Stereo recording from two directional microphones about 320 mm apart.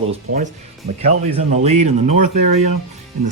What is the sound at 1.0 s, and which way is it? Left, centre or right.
Speech, right.